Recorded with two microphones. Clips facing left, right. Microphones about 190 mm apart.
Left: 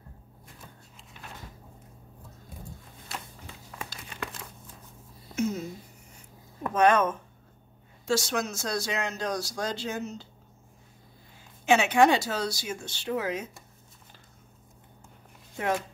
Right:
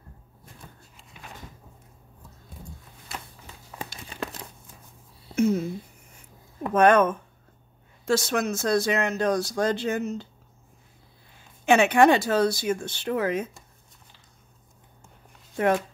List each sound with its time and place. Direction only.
0.9 s cupboard open or close: centre (ahead or behind)
3.7 s crumpling: 30° right (ahead or behind)
5.3 s speech: 55° right (ahead or behind)
6.7 s speech: 55° right (ahead or behind)
11.6 s speech: 55° right (ahead or behind)
15.5 s speech: 55° right (ahead or behind)